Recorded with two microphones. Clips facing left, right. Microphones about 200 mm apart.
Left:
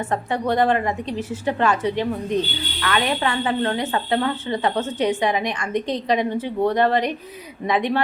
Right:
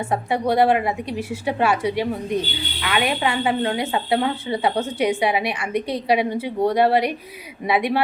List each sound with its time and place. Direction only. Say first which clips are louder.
0.0 s speech: right 1 dB; 10° right (ahead or behind)